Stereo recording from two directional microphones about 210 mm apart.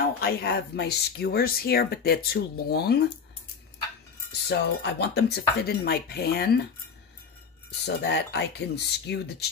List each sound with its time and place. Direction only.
0.2 s speech: 50° left (ahead or behind)
4.3 s speech: 50° left (ahead or behind)
7.8 s speech: 55° left (ahead or behind)